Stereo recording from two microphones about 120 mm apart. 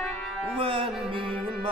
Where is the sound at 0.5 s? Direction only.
45° right (ahead or behind).